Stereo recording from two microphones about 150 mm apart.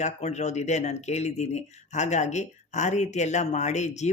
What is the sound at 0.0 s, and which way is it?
Speech, 50° left (ahead or behind).